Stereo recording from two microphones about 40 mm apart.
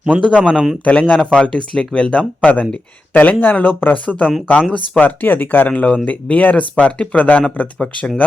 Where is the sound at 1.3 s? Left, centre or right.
Left.